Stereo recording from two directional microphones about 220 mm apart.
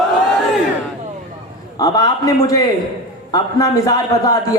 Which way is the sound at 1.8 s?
15° left (ahead or behind).